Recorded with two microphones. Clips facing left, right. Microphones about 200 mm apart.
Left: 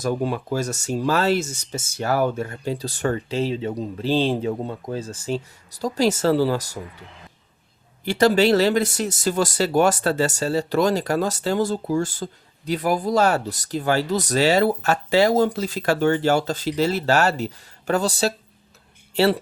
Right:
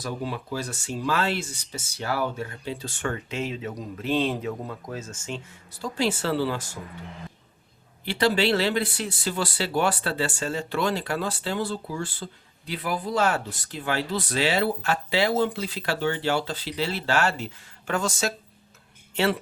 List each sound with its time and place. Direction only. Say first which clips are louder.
0.0 s speech: left 8 dB; 45° left (ahead or behind)
8.0 s speech: left 6 dB; 45° left (ahead or behind)